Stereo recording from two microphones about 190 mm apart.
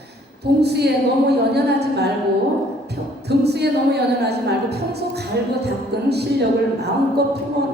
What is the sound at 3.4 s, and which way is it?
A woman's voice, 60° right (ahead or behind).